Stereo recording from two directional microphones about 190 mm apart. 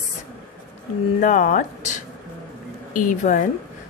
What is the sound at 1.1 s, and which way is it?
Speech, 40° left (ahead or behind).